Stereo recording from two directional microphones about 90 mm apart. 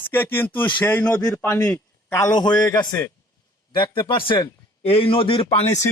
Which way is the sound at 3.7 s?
60° left (ahead or behind).